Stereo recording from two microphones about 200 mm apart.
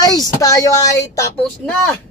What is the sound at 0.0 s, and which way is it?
Speech, 20° left (ahead or behind).